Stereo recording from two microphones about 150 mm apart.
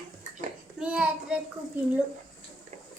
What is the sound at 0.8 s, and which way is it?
Speech, 10° right (ahead or behind).